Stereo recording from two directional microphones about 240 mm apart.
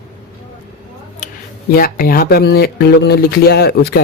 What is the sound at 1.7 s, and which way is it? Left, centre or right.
Speech, left.